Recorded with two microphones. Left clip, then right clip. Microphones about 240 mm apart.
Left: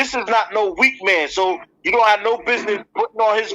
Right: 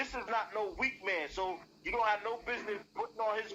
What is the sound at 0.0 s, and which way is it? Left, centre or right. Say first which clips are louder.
A man's voice: left 18 dB; left.